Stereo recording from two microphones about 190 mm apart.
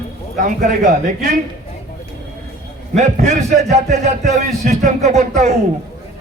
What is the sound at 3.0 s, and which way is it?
Speech, 35° right (ahead or behind).